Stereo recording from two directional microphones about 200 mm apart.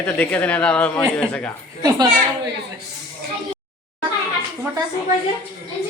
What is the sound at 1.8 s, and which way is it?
Speech, 20° right (ahead or behind).